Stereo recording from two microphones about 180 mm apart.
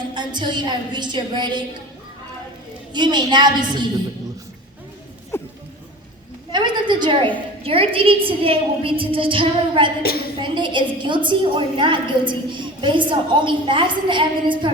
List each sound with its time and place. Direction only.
0.1 s a woman's voice: 25° right (ahead or behind)
2.9 s a woman's voice: 25° right (ahead or behind)
5.3 s a sound: 15° left (ahead or behind)
6.5 s a woman's voice: 25° right (ahead or behind)
10.0 s a woman's voice: 60° left (ahead or behind)
10.4 s a woman's voice: 25° right (ahead or behind)